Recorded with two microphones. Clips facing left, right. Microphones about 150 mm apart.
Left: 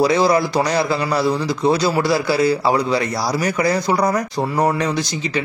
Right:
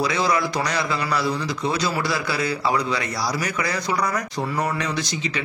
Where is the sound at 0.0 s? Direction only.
35° left (ahead or behind).